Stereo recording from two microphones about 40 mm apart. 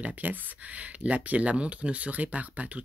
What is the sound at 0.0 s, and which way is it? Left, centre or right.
Speech, right.